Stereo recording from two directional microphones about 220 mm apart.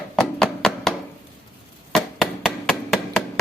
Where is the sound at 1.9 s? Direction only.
Centre (ahead or behind).